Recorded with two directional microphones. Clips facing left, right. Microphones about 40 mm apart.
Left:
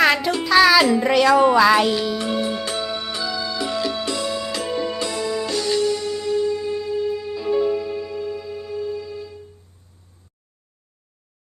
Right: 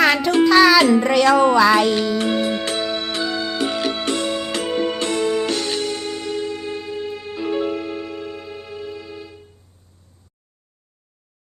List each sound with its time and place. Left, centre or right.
0.0 s music: centre
1.0 s speech: centre
2.1 s music: right